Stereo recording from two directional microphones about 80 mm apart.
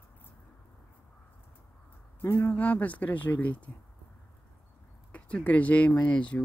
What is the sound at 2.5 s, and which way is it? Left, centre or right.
Speech, centre.